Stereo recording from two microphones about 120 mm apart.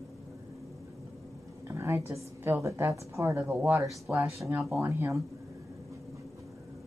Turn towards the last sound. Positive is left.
turn(degrees=-20)  # may be behind; listen again after turning